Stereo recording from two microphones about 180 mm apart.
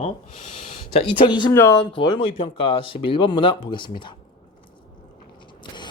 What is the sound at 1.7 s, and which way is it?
Speech, 25° left (ahead or behind).